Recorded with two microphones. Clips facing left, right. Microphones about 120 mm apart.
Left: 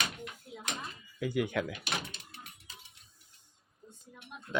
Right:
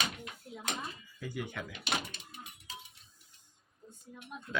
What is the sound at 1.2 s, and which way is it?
Speech, 90° left.